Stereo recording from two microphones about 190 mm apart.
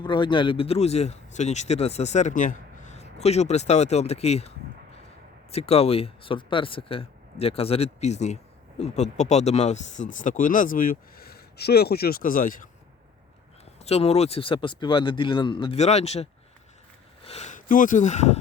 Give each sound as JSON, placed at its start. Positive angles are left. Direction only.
{"t": 0.0, "sound": "speech", "side_deg": 25}
{"t": 13.8, "sound": "speech", "side_deg": 35}